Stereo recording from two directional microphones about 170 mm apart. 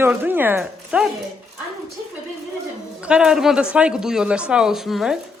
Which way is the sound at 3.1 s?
5° right (ahead or behind).